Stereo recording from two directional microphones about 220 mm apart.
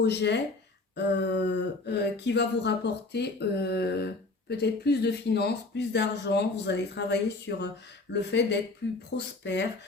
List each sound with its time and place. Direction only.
0.0 s speech: 50° left (ahead or behind)